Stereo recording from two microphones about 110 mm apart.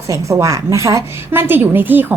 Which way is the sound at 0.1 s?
30° right (ahead or behind).